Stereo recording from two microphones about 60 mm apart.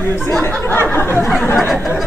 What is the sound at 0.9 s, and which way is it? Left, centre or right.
Speech, left.